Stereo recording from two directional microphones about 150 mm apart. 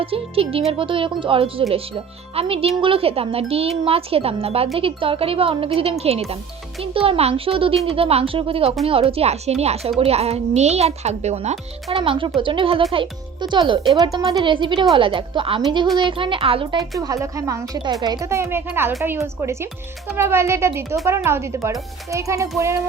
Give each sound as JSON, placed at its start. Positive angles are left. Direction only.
{"t": 0.0, "sound": "speech", "side_deg": -40}
{"t": 11.9, "sound": "speech", "side_deg": -35}
{"t": 17.0, "sound": "a child's voice", "side_deg": -20}